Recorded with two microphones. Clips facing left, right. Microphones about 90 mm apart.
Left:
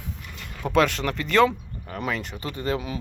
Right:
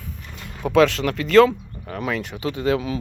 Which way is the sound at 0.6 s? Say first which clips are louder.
Right 5 dB; centre (ahead or behind).